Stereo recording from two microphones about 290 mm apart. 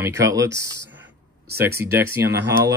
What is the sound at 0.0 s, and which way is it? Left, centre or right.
Speech, centre.